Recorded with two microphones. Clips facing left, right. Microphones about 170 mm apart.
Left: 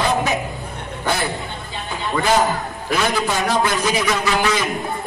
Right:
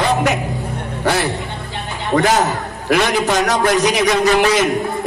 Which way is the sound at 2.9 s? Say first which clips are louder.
Right 5 dB; 85° right.